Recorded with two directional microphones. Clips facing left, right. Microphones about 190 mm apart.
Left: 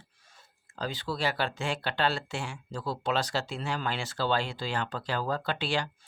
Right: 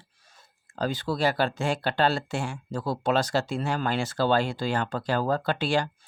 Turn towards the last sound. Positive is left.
turn(degrees=-45)  # may be behind; listen again after turning